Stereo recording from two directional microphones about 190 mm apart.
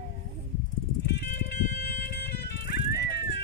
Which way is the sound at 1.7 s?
55° left (ahead or behind).